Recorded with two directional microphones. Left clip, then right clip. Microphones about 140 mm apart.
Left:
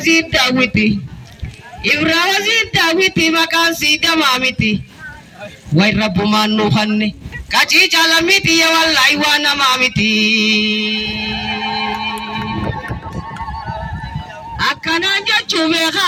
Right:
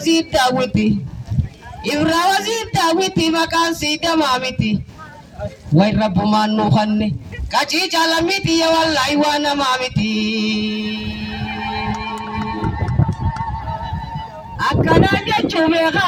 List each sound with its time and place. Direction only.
0.0 s a man's voice: 45° right (ahead or behind)
14.9 s speech: 35° right (ahead or behind)